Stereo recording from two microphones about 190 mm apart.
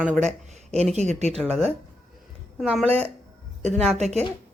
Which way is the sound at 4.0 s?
35° right (ahead or behind).